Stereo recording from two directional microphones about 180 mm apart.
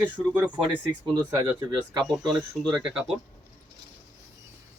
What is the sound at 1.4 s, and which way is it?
Speech, 15° right (ahead or behind).